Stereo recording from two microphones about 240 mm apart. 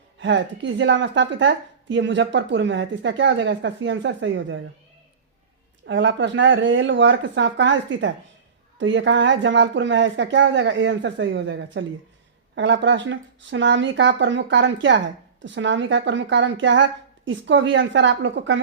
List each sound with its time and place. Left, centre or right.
0.2 s a woman's voice: right
5.8 s a woman's voice: right